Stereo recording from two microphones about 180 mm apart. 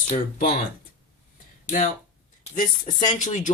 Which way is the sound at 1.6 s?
45° left (ahead or behind).